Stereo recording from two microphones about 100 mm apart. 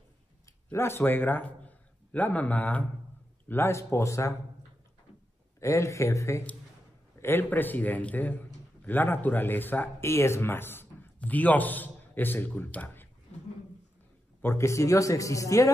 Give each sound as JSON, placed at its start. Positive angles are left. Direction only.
{"t": 0.7, "sound": "a man's voice", "side_deg": 25}
{"t": 5.6, "sound": "a man's voice", "side_deg": 30}
{"t": 14.4, "sound": "speech", "side_deg": 25}